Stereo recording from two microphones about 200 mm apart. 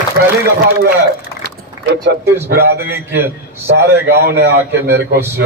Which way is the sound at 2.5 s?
50° right (ahead or behind).